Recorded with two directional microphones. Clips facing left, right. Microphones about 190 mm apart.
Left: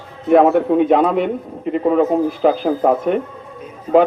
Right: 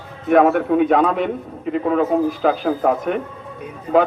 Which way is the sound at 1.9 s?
30° left (ahead or behind).